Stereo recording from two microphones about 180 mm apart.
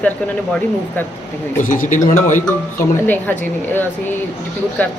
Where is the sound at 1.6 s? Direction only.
45° left (ahead or behind).